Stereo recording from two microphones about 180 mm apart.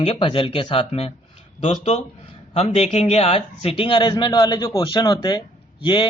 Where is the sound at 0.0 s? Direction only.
30° left (ahead or behind).